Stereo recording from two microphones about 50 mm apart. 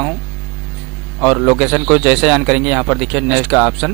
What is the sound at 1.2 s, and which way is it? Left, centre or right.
Speech, centre.